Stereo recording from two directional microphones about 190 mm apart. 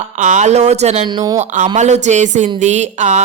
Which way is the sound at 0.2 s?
40° right (ahead or behind).